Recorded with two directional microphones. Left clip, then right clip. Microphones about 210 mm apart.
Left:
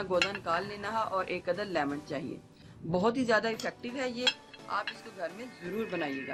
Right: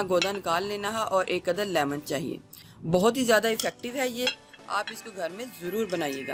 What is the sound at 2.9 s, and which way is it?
Speech, 40° right (ahead or behind).